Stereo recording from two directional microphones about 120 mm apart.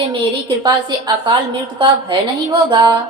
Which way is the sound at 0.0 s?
40° right (ahead or behind).